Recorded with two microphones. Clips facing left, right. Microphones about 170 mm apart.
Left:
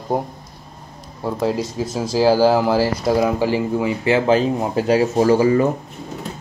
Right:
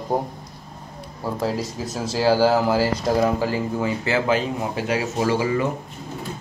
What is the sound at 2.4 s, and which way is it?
Speech, 10° left (ahead or behind).